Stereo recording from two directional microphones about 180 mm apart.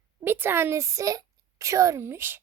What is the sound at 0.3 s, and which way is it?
A woman's voice, 10° right (ahead or behind).